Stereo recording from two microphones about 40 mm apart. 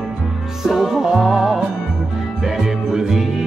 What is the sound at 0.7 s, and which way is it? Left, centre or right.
Music, centre.